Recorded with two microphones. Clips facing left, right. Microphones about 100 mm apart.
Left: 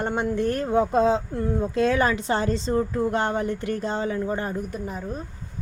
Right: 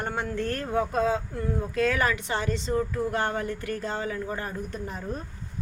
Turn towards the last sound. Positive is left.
turn(degrees=5)  # may be behind; listen again after turning